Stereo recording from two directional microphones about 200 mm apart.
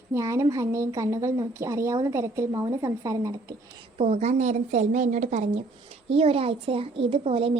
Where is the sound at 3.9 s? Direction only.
30° right (ahead or behind).